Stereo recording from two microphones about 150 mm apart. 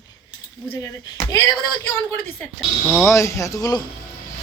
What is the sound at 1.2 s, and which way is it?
Speech, 20° left (ahead or behind).